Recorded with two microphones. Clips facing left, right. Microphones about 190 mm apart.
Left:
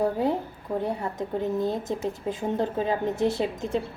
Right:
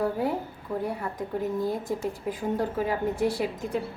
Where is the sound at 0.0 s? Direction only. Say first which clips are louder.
Left 2 dB; 20° left (ahead or behind).